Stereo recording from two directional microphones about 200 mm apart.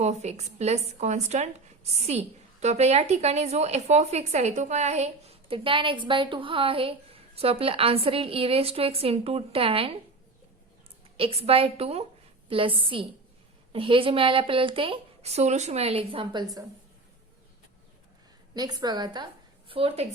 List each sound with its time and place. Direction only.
0.0 s a woman's voice: 35° right (ahead or behind)
11.2 s speech: 30° right (ahead or behind)
18.5 s a woman's voice: 20° right (ahead or behind)